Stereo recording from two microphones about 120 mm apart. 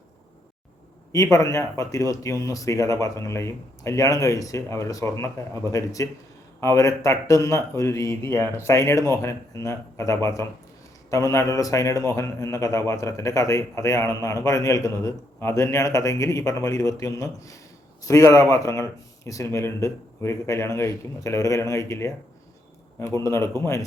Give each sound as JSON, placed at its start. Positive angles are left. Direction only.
{"t": 1.1, "sound": "a man's voice", "side_deg": 25}